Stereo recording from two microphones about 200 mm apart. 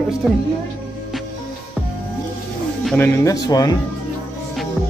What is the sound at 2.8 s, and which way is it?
Speech, 10° left (ahead or behind).